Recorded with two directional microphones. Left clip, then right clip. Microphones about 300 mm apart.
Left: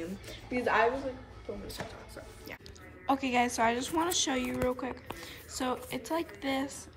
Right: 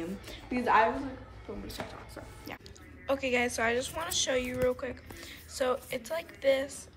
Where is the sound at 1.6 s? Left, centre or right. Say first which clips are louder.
Right 1 dB; centre.